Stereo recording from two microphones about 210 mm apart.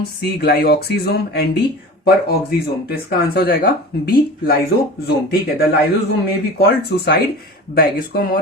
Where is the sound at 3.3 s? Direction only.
45° left (ahead or behind).